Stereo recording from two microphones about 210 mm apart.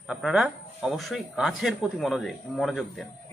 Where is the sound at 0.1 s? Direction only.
Centre (ahead or behind).